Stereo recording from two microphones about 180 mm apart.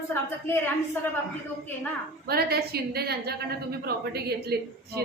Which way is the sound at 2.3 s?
60° right (ahead or behind).